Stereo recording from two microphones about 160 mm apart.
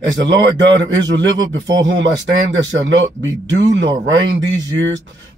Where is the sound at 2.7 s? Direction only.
90° right.